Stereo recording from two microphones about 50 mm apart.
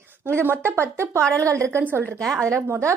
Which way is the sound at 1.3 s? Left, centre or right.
Right.